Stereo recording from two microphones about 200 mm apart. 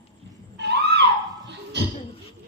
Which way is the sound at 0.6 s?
60° right (ahead or behind).